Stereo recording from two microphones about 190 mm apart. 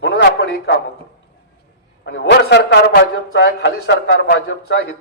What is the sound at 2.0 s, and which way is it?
Speech, 65° left (ahead or behind).